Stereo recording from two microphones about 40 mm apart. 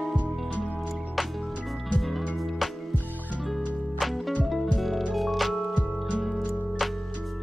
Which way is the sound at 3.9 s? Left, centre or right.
Centre.